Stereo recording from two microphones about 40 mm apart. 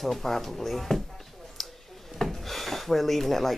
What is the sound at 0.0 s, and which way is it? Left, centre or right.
Speech, centre.